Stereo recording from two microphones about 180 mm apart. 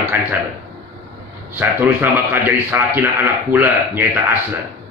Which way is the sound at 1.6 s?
10° right (ahead or behind).